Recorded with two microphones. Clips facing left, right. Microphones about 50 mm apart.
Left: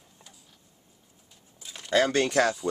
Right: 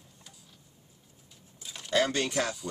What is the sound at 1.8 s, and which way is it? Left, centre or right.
Speech, left.